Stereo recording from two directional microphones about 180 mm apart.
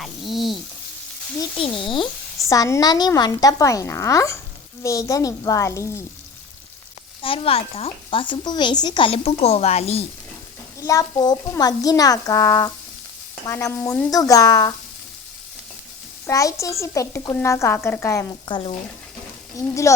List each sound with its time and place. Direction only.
0.0 s frying: centre (ahead or behind)
1.4 s speech: 30° left (ahead or behind)
2.5 s a woman's voice: 15° left (ahead or behind)
7.2 s speech: 30° left (ahead or behind)
10.8 s a woman's voice: 20° left (ahead or behind)
14.1 s speech: 20° left (ahead or behind)
16.2 s a woman's voice: 20° left (ahead or behind)